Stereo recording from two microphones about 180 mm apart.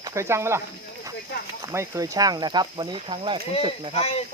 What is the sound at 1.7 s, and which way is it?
Speech, 15° right (ahead or behind).